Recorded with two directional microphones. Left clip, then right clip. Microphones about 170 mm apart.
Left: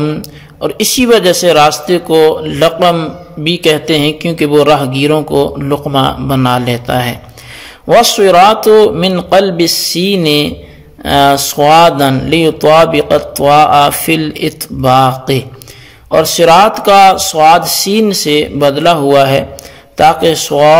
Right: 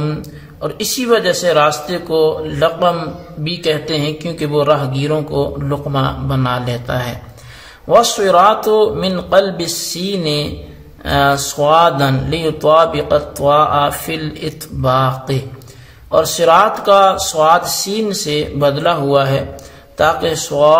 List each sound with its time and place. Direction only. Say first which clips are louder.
0.0 s a man's voice: left 7 dB; 35° left (ahead or behind)